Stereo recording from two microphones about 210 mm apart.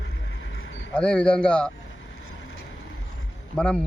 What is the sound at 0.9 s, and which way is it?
Speech, 5° left (ahead or behind).